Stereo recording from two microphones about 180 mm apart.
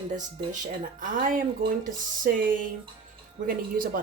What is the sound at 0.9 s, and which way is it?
Speech, 50° right (ahead or behind).